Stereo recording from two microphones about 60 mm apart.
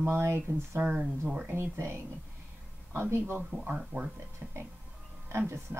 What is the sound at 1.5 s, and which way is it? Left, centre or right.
A woman's voice, right.